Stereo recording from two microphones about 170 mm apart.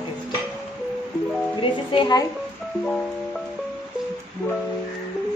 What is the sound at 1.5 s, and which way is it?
Speech, 25° left (ahead or behind).